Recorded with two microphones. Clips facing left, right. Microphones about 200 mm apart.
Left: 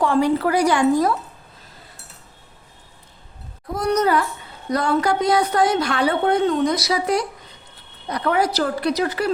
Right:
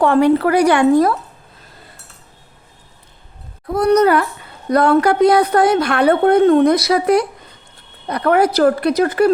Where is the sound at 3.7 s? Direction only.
60° right (ahead or behind).